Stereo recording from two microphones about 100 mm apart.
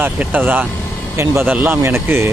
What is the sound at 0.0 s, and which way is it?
Speech, 20° right (ahead or behind).